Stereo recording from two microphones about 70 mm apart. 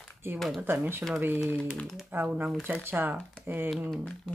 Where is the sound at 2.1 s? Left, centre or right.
Right.